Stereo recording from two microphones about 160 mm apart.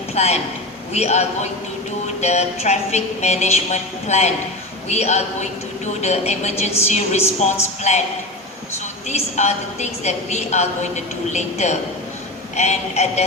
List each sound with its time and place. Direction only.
0.1 s a sound: 45° left (ahead or behind)
0.9 s a woman's voice: 45° left (ahead or behind)
9.0 s a woman's voice: 45° left (ahead or behind)